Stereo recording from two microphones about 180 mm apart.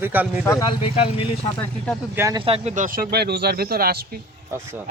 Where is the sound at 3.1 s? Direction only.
65° right (ahead or behind).